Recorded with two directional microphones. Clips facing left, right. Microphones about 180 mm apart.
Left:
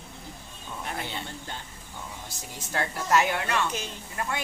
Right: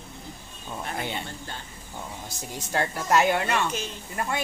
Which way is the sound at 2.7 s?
15° right (ahead or behind).